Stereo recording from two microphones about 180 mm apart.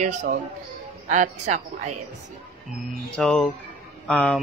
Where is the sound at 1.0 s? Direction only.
40° right (ahead or behind).